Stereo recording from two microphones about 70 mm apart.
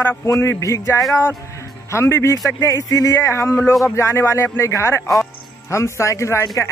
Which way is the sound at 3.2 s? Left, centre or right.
Left.